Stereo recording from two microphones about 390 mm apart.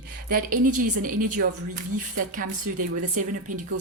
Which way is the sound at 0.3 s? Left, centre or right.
Right.